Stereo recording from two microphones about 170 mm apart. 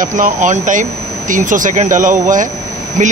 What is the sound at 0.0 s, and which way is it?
Speech, 50° right (ahead or behind).